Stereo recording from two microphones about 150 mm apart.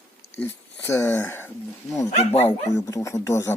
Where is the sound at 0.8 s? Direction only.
15° left (ahead or behind).